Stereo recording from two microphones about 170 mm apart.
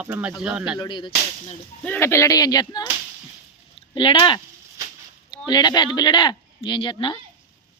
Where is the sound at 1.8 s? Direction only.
10° left (ahead or behind).